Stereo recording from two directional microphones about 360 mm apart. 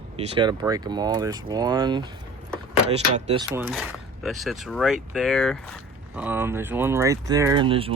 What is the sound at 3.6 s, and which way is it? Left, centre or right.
Speech, centre.